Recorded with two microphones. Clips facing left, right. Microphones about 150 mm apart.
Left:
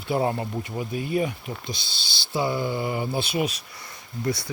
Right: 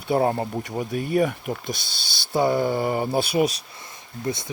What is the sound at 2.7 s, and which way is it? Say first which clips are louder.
Speech: right 4 dB; 40° right (ahead or behind).